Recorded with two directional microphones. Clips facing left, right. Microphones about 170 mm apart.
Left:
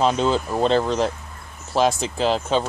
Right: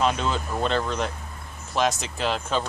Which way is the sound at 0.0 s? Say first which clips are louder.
Left 5 dB; 35° left (ahead or behind).